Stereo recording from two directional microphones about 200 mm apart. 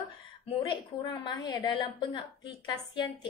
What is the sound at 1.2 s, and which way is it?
A woman's voice, 25° left (ahead or behind).